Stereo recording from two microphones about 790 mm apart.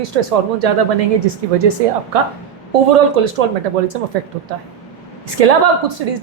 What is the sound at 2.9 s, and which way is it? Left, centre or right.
A woman's voice, right.